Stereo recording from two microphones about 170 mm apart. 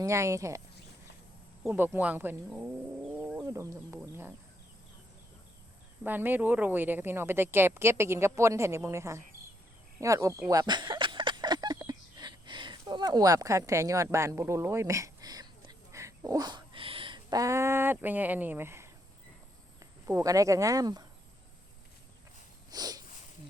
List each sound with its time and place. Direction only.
0.0 s a woman's voice: 15° right (ahead or behind)
1.7 s a woman's voice: 10° right (ahead or behind)
6.0 s a woman's voice: 10° right (ahead or behind)
10.0 s a sound: 20° right (ahead or behind)
19.8 s speech: 20° right (ahead or behind)
22.7 s a sound: 20° right (ahead or behind)